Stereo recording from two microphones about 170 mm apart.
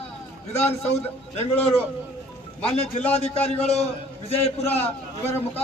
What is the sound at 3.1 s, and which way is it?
Speech, 35° left (ahead or behind).